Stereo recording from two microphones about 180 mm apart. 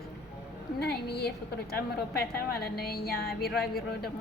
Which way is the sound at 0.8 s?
65° left (ahead or behind).